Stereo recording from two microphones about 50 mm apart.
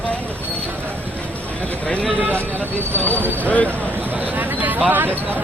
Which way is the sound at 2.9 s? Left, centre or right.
Left.